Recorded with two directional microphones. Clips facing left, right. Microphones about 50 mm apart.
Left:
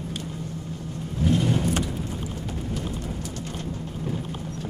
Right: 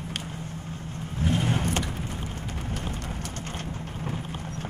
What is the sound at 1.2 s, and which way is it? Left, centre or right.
Vehicle, right.